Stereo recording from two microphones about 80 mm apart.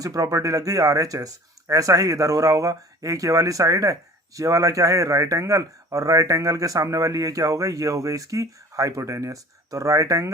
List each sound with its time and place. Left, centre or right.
0.0 s a man's voice: right